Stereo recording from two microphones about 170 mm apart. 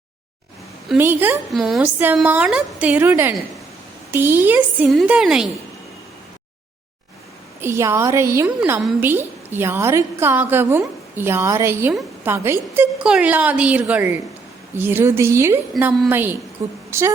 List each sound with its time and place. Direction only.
0.9 s a woman's voice: 10° right (ahead or behind)
1.5 s a woman's voice: centre (ahead or behind)
1.8 s a woman's voice: 10° right (ahead or behind)
7.6 s a woman's voice: 15° right (ahead or behind)